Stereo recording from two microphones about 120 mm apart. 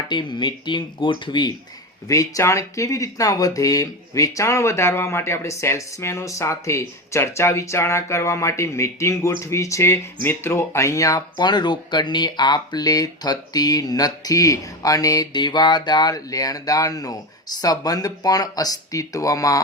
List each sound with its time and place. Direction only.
0.1 s speech: 40° left (ahead or behind)
2.0 s speech: 25° left (ahead or behind)